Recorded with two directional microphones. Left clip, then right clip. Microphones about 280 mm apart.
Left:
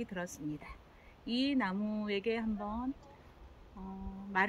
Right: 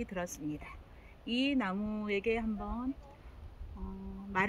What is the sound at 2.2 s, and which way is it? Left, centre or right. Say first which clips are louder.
Speech: right 2 dB; centre.